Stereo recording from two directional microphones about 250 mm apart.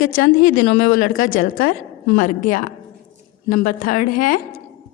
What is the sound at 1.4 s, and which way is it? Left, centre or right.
Speech, left.